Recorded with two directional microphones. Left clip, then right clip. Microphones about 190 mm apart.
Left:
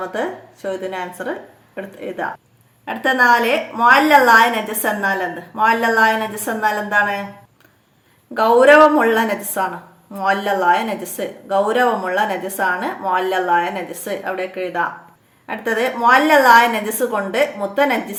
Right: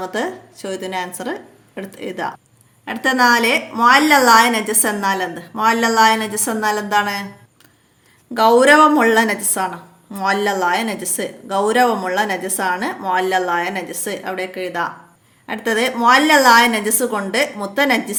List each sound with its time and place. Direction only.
0.0 s a woman's voice: 35° right (ahead or behind)
8.3 s a woman's voice: 35° right (ahead or behind)